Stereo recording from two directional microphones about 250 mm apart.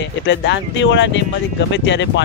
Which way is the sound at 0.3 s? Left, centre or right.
Left.